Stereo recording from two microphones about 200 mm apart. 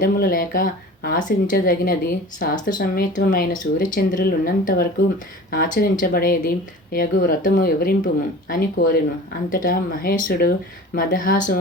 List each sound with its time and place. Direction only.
0.0 s a woman's voice: 45° left (ahead or behind)